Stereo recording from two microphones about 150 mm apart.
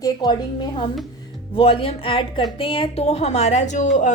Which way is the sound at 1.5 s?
40° left (ahead or behind).